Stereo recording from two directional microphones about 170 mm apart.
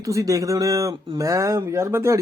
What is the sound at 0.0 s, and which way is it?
Speech, 20° right (ahead or behind).